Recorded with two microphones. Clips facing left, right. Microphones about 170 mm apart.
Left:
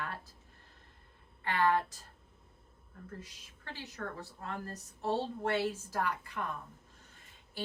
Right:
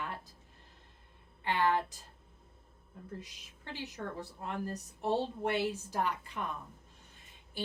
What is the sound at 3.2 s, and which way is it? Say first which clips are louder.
Speech: right 1 dB; 15° right (ahead or behind).